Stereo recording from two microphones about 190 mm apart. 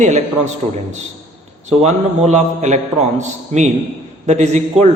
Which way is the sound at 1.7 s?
35° right (ahead or behind).